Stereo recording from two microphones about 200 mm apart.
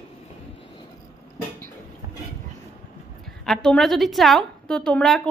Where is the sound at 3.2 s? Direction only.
Centre (ahead or behind).